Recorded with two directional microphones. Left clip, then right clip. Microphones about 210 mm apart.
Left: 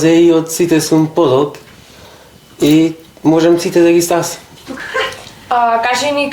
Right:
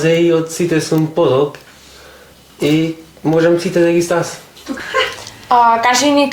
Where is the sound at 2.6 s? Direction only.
35° left (ahead or behind).